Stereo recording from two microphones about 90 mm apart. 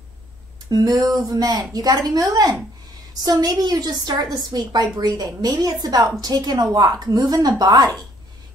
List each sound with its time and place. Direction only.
0.7 s a woman's voice: 50° right (ahead or behind)